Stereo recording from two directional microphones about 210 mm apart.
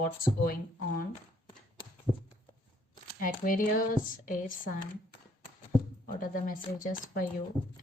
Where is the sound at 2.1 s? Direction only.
20° left (ahead or behind).